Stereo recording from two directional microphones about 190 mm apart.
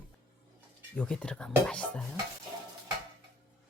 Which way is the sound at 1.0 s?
5° left (ahead or behind).